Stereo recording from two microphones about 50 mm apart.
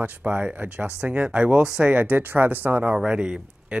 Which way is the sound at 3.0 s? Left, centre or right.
Centre.